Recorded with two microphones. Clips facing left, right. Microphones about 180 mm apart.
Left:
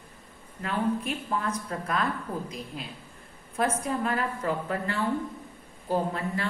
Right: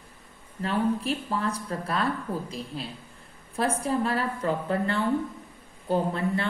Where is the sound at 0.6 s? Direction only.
30° right (ahead or behind).